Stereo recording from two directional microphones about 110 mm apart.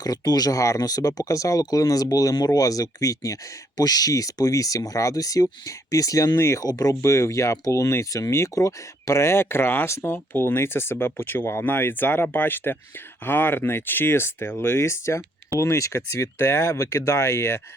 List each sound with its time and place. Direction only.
0.0 s speech: 35° left (ahead or behind)